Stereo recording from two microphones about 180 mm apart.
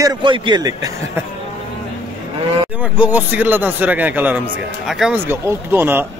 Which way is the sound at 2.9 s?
10° right (ahead or behind).